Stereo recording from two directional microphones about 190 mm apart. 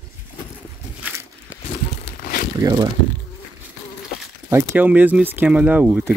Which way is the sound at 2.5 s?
15° right (ahead or behind).